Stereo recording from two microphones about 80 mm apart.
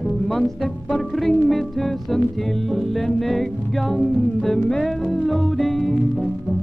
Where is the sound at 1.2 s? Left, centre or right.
Centre.